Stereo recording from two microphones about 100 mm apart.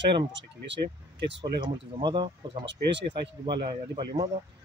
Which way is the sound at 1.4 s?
50° right (ahead or behind).